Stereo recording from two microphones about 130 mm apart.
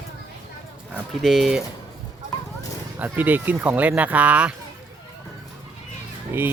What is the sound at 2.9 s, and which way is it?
Speech, 15° right (ahead or behind).